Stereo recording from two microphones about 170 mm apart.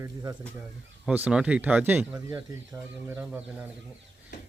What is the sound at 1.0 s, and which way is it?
Speech, 5° right (ahead or behind).